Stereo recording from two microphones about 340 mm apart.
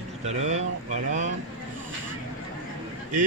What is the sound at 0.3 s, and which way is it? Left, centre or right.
Speech, centre.